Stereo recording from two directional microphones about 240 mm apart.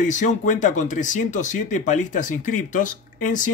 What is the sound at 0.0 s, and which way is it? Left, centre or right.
Speech, left.